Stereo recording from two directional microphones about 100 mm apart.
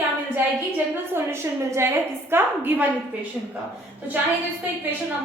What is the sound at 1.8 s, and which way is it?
A woman's voice, 25° right (ahead or behind).